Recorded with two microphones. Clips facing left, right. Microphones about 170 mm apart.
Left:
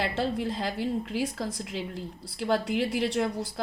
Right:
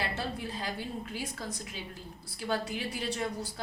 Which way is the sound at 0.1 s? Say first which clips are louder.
Left 7 dB; 85° left.